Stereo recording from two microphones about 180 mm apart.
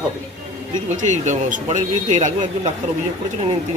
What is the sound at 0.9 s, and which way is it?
Speech, 40° right (ahead or behind).